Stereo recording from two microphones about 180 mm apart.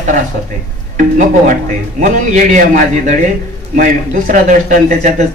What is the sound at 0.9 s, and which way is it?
Speech, 45° right (ahead or behind).